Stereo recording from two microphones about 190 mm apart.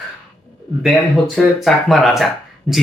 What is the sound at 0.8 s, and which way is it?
Speech, centre (ahead or behind).